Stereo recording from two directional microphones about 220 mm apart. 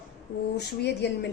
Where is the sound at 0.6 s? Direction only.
50° left (ahead or behind).